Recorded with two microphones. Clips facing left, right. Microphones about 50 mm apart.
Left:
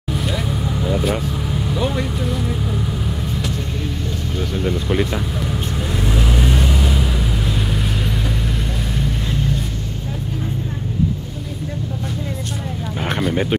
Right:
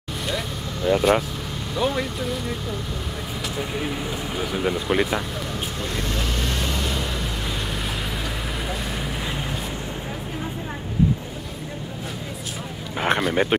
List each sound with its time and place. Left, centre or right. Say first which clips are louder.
0.8 s speech: right 4 dB; centre
4.4 s speech: left 2 dB; centre
6.1 s vehicle: left 6 dB; centre
9.0 s vehicle: left 5 dB; centre
13.3 s speech: left 1 dB; centre